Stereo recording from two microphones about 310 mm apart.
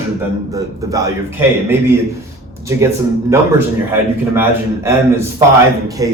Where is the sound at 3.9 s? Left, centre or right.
Centre.